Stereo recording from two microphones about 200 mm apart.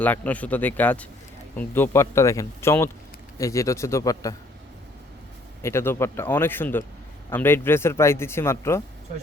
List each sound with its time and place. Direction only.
0.0 s speech: 10° left (ahead or behind)
5.6 s speech: 10° left (ahead or behind)